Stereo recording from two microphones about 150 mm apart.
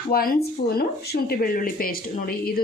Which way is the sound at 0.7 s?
90° left.